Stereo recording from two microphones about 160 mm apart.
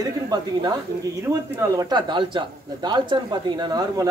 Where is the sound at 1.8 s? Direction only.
25° right (ahead or behind).